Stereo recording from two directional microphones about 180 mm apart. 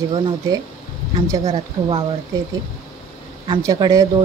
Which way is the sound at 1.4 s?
30° right (ahead or behind).